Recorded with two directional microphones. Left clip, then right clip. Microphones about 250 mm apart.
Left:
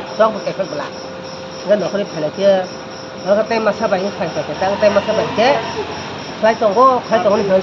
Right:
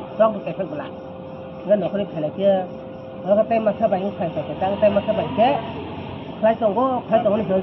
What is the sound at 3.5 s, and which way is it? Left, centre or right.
Speech, left.